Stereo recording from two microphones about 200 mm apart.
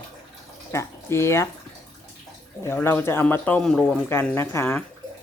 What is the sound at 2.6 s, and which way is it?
Speech, 10° left (ahead or behind).